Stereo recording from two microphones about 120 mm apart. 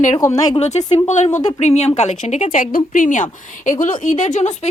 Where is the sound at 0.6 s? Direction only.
70° left (ahead or behind).